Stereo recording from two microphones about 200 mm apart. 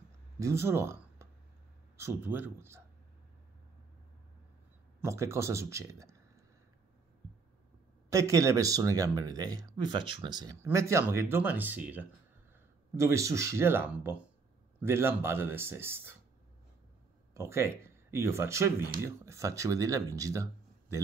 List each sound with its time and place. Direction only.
0.4 s speech: 15° right (ahead or behind)
5.0 s a man's voice: 15° right (ahead or behind)
8.1 s speech: 15° right (ahead or behind)
17.3 s speech: 15° right (ahead or behind)